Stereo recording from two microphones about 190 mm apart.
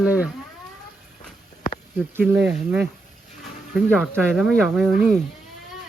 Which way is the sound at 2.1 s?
10° right (ahead or behind).